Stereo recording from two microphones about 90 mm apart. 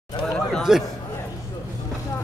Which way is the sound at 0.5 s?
Centre (ahead or behind).